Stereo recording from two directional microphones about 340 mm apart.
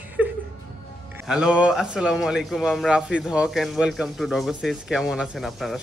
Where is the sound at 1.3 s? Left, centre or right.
Centre.